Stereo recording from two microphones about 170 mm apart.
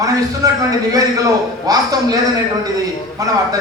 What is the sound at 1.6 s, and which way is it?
Speech, 20° right (ahead or behind).